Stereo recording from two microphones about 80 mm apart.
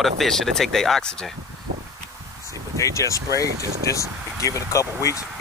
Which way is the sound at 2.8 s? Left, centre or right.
Left.